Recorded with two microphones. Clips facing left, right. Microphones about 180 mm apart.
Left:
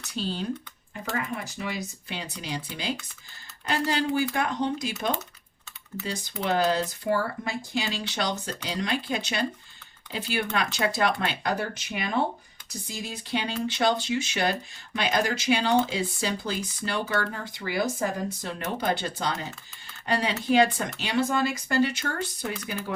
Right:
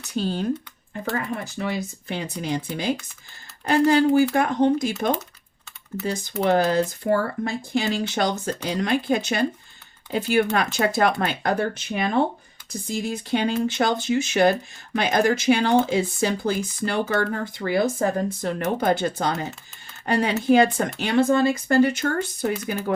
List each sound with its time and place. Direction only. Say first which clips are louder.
0.1 s speech: right 6 dB; 50° right (ahead or behind)